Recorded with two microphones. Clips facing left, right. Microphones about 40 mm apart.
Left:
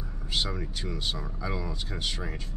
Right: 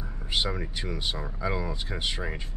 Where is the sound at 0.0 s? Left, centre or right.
Centre.